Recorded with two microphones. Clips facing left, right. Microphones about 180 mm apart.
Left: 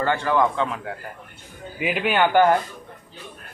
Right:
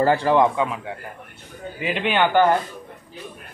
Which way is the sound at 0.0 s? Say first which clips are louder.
Right 4 dB; 35° right (ahead or behind).